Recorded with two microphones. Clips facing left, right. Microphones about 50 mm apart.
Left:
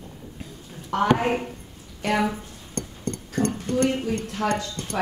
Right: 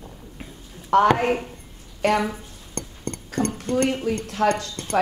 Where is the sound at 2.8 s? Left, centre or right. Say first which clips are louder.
Left 2 dB; right.